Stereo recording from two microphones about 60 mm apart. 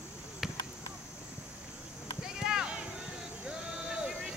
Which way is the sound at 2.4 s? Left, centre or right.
Centre.